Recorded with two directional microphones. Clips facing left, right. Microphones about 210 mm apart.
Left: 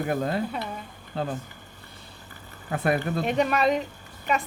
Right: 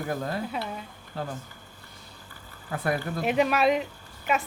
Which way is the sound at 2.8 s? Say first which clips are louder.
Left 4 dB; 20° left (ahead or behind).